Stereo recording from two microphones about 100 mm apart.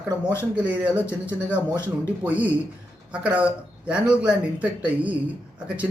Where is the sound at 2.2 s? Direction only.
15° right (ahead or behind).